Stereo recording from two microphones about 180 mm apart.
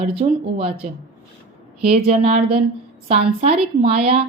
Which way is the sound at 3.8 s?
30° right (ahead or behind).